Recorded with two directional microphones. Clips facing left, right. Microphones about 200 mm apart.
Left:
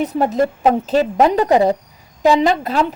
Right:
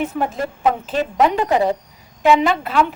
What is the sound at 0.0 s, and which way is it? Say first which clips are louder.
A woman's voice: left 5 dB; 40° left (ahead or behind).